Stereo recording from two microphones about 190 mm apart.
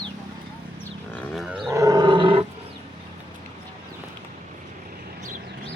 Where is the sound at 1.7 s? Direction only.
20° right (ahead or behind).